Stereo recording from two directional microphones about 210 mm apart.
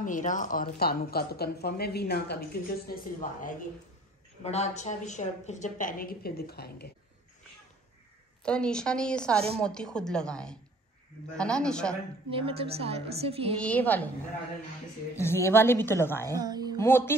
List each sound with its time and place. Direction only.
0.0 s a woman's voice: 40° left (ahead or behind)
8.5 s a woman's voice: 5° left (ahead or behind)
12.3 s a woman's voice: 25° right (ahead or behind)
13.6 s a woman's voice: 5° left (ahead or behind)
15.1 s a woman's voice: 10° left (ahead or behind)
16.3 s speech: 20° right (ahead or behind)
16.7 s a woman's voice: 10° left (ahead or behind)